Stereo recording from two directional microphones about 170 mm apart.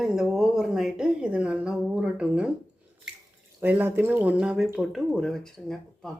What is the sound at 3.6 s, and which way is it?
Speech, 10° right (ahead or behind).